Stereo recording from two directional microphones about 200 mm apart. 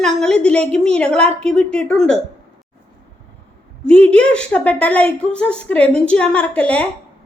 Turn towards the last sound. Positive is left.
turn(degrees=5)  # may be behind; listen again after turning